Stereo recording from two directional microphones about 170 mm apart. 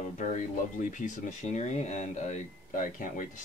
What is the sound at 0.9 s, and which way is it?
Speech, 45° left (ahead or behind).